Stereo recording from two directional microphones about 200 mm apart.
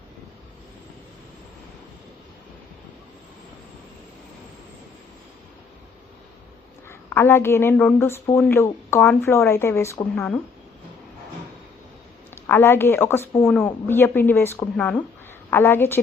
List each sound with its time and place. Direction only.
6.8 s a woman's voice: 10° left (ahead or behind)
12.3 s a woman's voice: 10° left (ahead or behind)